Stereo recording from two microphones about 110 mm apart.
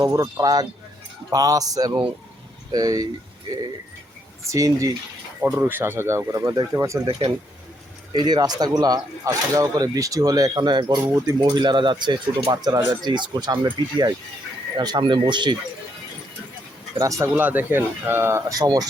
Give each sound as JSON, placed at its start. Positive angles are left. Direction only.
{"t": 0.0, "sound": "speech", "side_deg": -35}
{"t": 4.4, "sound": "speech", "side_deg": -30}
{"t": 5.5, "sound": "speech", "side_deg": -20}
{"t": 8.1, "sound": "speech", "side_deg": -40}
{"t": 11.0, "sound": "speech", "side_deg": -30}
{"t": 11.3, "sound": "speech", "side_deg": -45}
{"t": 17.0, "sound": "speech", "side_deg": -30}